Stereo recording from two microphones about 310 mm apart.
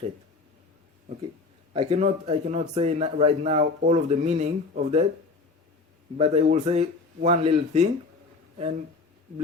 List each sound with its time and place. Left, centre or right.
1.7 s speech: centre
6.1 s speech: centre